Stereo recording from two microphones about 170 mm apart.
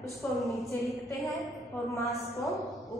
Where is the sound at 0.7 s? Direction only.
20° left (ahead or behind).